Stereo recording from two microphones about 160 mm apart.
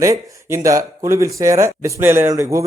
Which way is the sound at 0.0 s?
15° right (ahead or behind).